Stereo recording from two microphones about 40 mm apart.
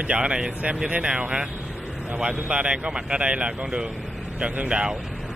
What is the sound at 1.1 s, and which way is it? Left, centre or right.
Speech, right.